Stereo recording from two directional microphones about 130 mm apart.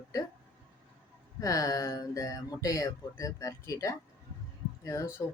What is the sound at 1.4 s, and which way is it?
Speech, 25° left (ahead or behind).